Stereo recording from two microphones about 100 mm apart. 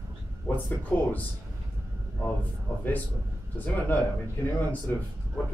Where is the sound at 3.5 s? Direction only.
20° left (ahead or behind).